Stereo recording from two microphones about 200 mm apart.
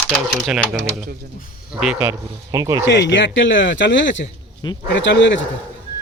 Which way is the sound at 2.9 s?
65° left (ahead or behind).